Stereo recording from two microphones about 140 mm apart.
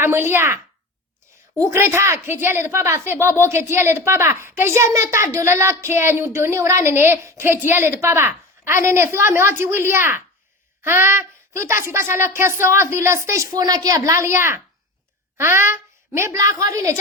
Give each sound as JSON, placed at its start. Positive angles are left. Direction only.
{"t": 0.0, "sound": "a woman's voice", "side_deg": -15}
{"t": 1.6, "sound": "a woman's voice", "side_deg": -20}